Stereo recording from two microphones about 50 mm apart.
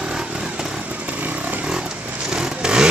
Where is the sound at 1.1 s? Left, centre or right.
Right.